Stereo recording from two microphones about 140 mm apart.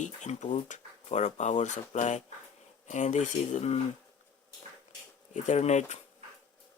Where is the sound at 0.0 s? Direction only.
60° left (ahead or behind).